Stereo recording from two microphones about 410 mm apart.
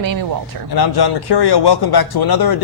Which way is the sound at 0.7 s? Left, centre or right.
Left.